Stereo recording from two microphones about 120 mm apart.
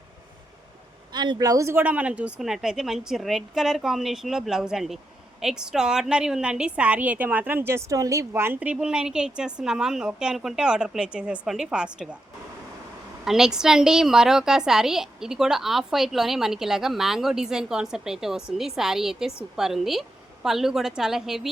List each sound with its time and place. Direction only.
1.1 s a woman's voice: 35° right (ahead or behind); by 12.0 s 5° right (ahead or behind)
13.2 s a woman's voice: 5° right (ahead or behind)